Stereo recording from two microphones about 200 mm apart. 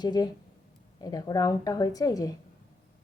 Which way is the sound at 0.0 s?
20° left (ahead or behind).